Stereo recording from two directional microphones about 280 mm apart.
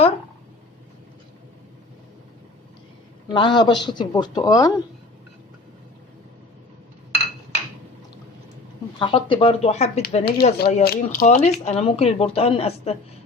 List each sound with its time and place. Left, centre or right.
3.3 s speech: centre
9.0 s speech: centre